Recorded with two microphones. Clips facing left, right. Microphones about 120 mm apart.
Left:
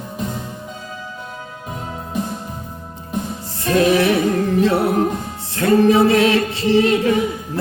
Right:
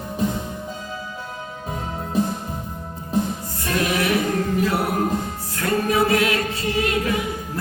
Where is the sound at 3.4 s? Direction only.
30° left (ahead or behind).